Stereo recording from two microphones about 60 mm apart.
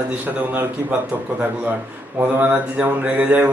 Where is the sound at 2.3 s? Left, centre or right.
Right.